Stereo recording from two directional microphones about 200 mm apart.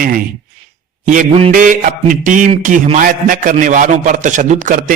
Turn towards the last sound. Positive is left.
turn(degrees=-40)  # may be behind; listen again after turning